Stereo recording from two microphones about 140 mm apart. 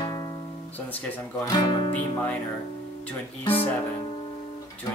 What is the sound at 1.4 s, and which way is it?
Speech, 30° left (ahead or behind).